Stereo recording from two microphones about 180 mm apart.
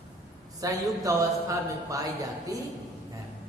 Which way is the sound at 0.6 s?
20° right (ahead or behind).